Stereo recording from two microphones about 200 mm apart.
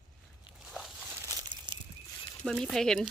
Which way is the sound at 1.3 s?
20° right (ahead or behind).